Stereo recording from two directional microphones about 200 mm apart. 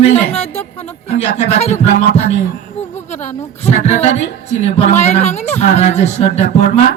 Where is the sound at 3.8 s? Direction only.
35° left (ahead or behind).